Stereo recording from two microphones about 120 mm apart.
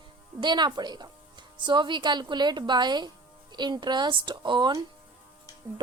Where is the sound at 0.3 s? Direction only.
40° right (ahead or behind).